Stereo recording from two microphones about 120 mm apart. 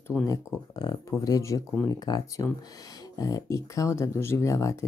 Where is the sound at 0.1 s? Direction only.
5° left (ahead or behind).